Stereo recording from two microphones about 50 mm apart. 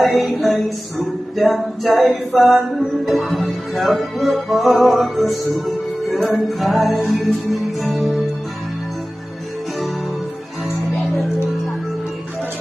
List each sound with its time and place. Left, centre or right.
0.0 s speech: centre
6.1 s music: centre
6.5 s speech: centre